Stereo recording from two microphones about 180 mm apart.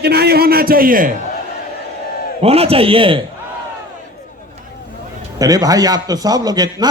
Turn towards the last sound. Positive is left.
turn(degrees=-20)  # may be behind; listen again after turning